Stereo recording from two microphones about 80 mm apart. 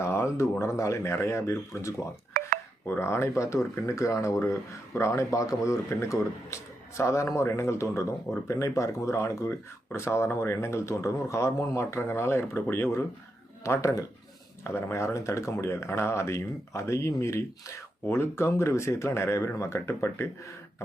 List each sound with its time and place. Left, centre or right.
0.0 s speech: left
13.7 s speech: left